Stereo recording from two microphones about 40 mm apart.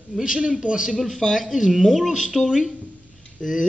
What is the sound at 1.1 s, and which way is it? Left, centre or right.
Speech, centre.